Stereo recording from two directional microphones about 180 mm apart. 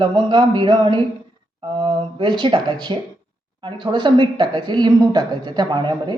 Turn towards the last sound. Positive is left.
turn(degrees=-25)  # may be behind; listen again after turning